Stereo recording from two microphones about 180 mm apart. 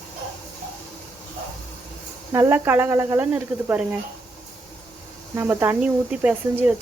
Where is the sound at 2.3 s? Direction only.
15° right (ahead or behind).